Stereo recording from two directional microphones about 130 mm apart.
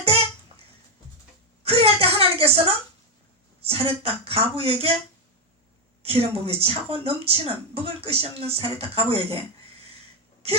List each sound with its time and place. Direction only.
1.6 s a sound: 50° right (ahead or behind)
3.6 s speech: 45° right (ahead or behind)
6.0 s speech: 50° right (ahead or behind)